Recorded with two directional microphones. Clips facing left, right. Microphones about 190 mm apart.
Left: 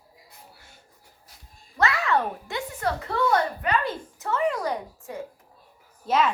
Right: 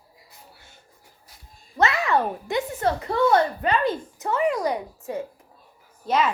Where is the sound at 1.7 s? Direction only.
20° right (ahead or behind).